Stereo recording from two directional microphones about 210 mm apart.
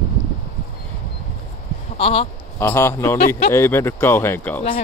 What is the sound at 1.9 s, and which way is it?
Speech, 25° left (ahead or behind).